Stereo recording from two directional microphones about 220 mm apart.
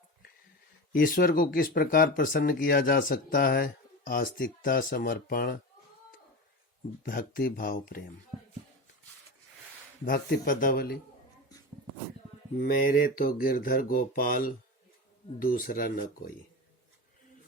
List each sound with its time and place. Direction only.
0.9 s speech: 40° left (ahead or behind)
7.0 s speech: 40° left (ahead or behind)
10.1 s speech: 40° left (ahead or behind)
12.5 s speech: 40° left (ahead or behind)